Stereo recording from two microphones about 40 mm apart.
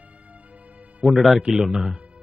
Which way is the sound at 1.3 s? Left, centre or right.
Right.